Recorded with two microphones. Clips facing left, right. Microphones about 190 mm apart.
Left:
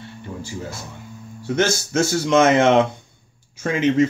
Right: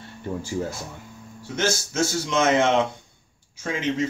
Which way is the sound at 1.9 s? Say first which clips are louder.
Left 6 dB; 65° left (ahead or behind).